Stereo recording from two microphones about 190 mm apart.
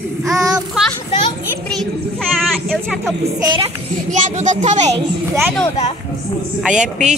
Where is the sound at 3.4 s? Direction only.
25° right (ahead or behind).